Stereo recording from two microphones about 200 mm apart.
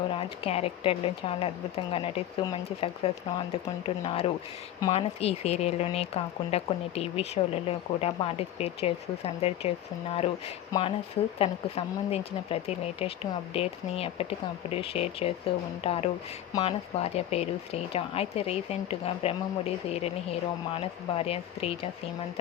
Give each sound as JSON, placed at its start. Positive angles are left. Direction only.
{"t": 0.1, "sound": "speech", "side_deg": 30}
{"t": 16.5, "sound": "speech", "side_deg": 20}
{"t": 17.0, "sound": "speech", "side_deg": 30}